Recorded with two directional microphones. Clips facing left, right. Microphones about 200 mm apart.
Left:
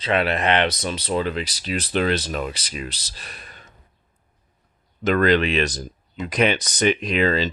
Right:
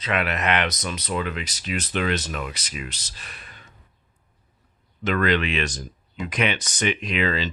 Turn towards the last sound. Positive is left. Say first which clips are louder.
# left 4 dB
turn(degrees=40)  # may be behind; listen again after turning